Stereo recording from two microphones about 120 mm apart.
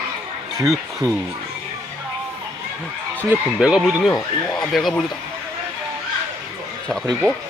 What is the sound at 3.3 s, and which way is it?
Speech, 10° right (ahead or behind).